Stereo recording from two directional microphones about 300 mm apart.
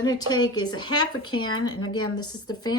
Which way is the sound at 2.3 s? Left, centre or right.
Centre.